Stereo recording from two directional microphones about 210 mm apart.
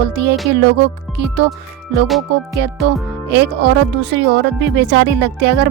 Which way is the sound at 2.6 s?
55° right (ahead or behind).